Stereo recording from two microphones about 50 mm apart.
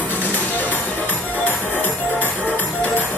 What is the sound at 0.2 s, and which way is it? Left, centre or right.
Music, left.